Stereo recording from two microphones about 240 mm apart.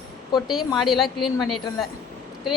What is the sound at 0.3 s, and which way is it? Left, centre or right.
Speech, centre.